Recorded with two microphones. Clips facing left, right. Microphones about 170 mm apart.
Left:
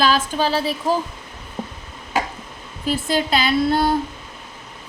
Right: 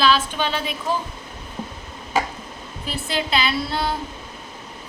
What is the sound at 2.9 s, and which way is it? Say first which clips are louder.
A woman's voice: left 5 dB; 45° left (ahead or behind).